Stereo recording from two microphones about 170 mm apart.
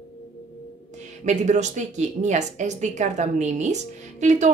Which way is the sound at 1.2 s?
45° right (ahead or behind).